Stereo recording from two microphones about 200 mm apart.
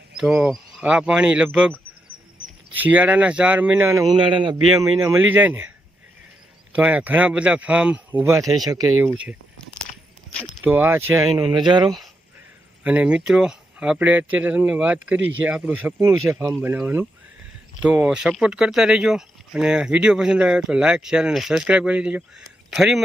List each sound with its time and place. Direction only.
0.2 s speech: 5° right (ahead or behind)
2.7 s speech: 10° right (ahead or behind)
6.7 s speech: 5° right (ahead or behind)
10.6 s speech: 10° right (ahead or behind)
12.8 s speech: 5° right (ahead or behind)